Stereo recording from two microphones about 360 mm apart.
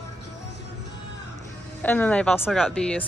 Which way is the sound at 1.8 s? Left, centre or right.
Centre.